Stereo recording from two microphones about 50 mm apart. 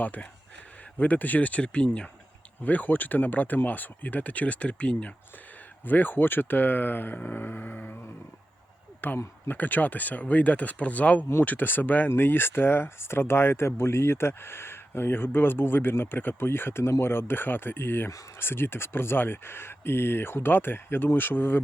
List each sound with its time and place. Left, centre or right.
0.0 s speech: left
2.6 s speech: left
5.8 s speech: left
9.0 s speech: left